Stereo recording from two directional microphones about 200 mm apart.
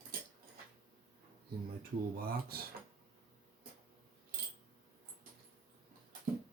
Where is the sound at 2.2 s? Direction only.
50° right (ahead or behind).